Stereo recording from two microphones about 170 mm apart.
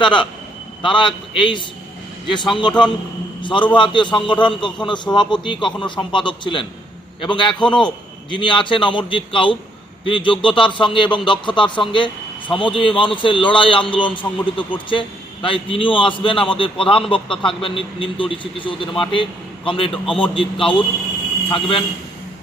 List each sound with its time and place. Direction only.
0.0 s speech: 30° left (ahead or behind)
3.4 s speech: 30° left (ahead or behind)